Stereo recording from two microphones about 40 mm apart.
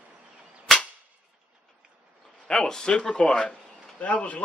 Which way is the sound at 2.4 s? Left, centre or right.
Centre.